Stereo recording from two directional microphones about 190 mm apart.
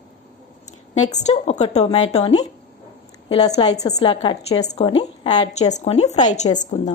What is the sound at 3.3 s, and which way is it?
Speech, 20° left (ahead or behind).